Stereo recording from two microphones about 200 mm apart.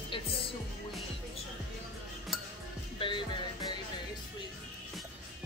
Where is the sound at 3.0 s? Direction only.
25° left (ahead or behind).